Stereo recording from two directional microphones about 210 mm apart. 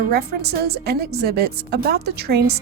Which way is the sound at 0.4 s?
50° right (ahead or behind).